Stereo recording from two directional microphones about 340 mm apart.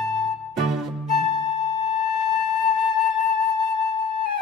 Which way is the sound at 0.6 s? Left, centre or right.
Centre.